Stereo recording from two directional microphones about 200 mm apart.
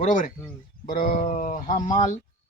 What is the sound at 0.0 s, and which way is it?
Speech, 40° left (ahead or behind).